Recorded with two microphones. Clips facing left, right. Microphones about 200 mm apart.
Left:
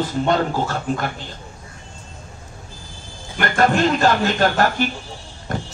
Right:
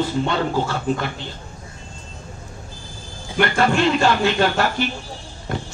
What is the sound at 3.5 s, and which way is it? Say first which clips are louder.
Speech: left 3 dB; 45° left (ahead or behind).